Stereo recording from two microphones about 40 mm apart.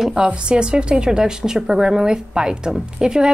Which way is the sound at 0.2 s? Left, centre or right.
Right.